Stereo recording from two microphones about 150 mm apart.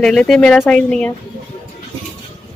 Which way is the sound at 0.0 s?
5° left (ahead or behind).